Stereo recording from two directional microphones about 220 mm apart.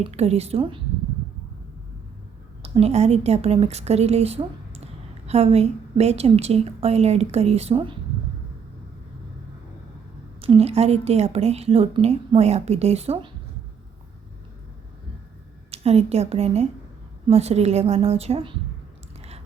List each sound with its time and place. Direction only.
0.0 s a woman's voice: 30° right (ahead or behind)
2.6 s a woman's voice: 25° right (ahead or behind)
10.4 s a woman's voice: 25° right (ahead or behind)
15.7 s a woman's voice: 30° right (ahead or behind)